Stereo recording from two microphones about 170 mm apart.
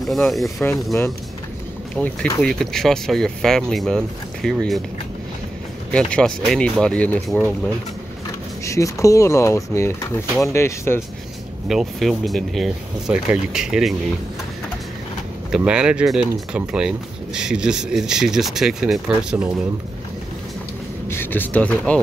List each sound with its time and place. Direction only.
0.0 s speech: centre (ahead or behind)
0.9 s speech: 15° left (ahead or behind)
5.9 s speech: 5° left (ahead or behind)
8.6 s speech: 20° left (ahead or behind)
11.6 s speech: centre (ahead or behind)
15.5 s speech: 5° right (ahead or behind)
21.1 s speech: 10° left (ahead or behind)